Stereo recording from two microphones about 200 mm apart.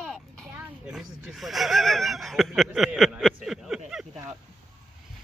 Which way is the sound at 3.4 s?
5° right (ahead or behind).